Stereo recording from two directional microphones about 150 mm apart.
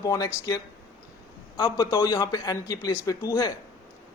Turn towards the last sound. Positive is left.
turn(degrees=25)  # may be behind; listen again after turning